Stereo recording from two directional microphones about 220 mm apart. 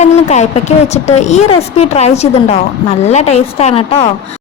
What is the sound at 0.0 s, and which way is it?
A woman's voice, 30° left (ahead or behind).